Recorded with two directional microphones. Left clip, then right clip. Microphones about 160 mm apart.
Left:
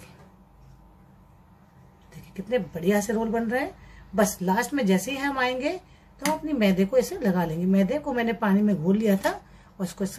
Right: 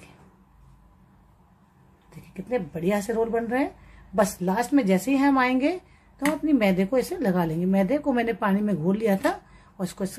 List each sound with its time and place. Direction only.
2.5 s a woman's voice: 50° right (ahead or behind)